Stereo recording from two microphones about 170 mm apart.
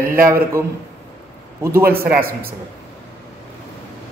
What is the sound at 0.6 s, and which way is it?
A woman's voice, 15° right (ahead or behind).